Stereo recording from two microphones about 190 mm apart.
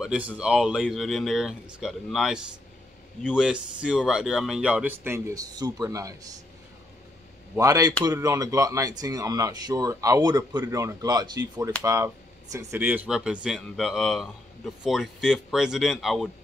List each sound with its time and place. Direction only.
0.0 s speech: 5° right (ahead or behind)
7.5 s speech: 15° right (ahead or behind); by 16.3 s centre (ahead or behind)